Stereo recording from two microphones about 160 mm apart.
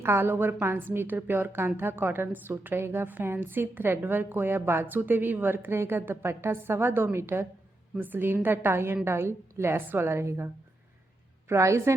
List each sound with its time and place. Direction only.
0.0 s a woman's voice: 15° right (ahead or behind)